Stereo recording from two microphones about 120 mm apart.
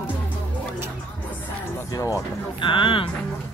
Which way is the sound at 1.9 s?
25° left (ahead or behind).